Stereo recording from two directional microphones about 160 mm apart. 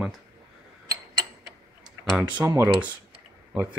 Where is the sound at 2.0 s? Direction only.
5° right (ahead or behind).